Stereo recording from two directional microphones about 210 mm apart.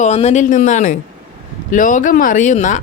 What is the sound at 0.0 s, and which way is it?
Speech, 30° left (ahead or behind).